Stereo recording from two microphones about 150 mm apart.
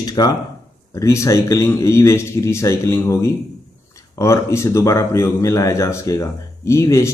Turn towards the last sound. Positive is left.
turn(degrees=20)  # may be behind; listen again after turning